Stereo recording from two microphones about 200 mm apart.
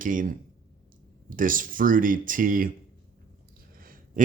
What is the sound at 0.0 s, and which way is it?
Speech, 45° right (ahead or behind).